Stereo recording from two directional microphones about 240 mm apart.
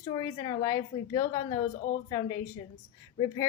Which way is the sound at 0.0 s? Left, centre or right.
Centre.